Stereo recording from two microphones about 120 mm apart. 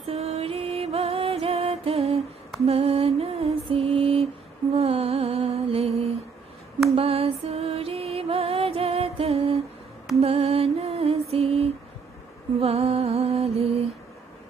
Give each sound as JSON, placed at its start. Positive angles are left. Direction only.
{"t": 0.0, "sound": "music", "side_deg": -60}
{"t": 2.6, "sound": "mantra", "side_deg": -55}
{"t": 4.7, "sound": "music", "side_deg": -55}